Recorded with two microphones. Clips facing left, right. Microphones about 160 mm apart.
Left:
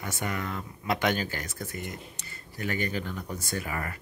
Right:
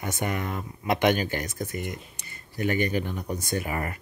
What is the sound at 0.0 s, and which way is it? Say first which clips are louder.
Speech: right 4 dB; 20° right (ahead or behind).